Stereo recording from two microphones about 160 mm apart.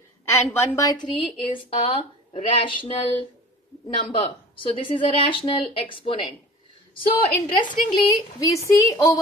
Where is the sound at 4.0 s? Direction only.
30° left (ahead or behind).